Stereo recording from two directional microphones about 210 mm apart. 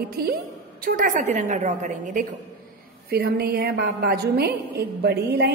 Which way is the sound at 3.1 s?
45° right (ahead or behind).